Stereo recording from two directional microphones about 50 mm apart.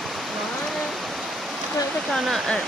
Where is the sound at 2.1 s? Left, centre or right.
Centre.